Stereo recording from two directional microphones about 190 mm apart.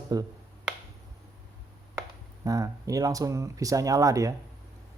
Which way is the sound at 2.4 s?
20° right (ahead or behind).